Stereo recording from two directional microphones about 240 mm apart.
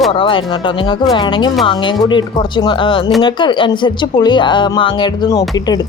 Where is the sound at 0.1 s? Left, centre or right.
Left.